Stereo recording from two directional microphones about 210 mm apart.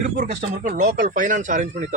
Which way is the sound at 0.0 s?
35° right (ahead or behind).